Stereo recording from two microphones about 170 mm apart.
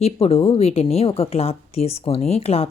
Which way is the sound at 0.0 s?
35° left (ahead or behind).